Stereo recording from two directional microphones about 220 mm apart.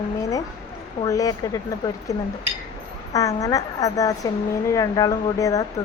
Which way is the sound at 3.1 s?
15° left (ahead or behind).